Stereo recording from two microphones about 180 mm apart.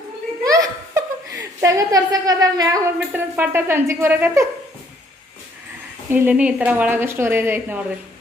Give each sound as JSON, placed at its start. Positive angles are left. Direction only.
{"t": 0.4, "sound": "speech", "side_deg": -20}
{"t": 6.1, "sound": "a woman's voice", "side_deg": -10}